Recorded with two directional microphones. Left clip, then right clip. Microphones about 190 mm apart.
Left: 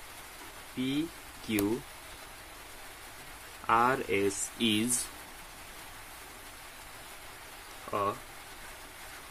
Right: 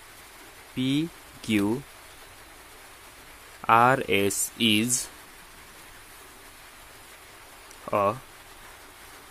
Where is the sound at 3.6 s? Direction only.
50° right (ahead or behind).